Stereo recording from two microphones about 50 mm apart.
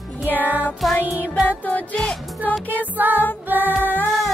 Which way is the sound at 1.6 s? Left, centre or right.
Left.